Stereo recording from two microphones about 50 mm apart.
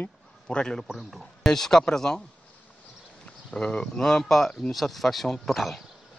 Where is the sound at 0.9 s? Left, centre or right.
Centre.